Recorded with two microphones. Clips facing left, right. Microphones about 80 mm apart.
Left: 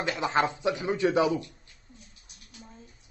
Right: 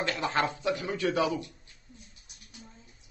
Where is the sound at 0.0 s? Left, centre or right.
Centre.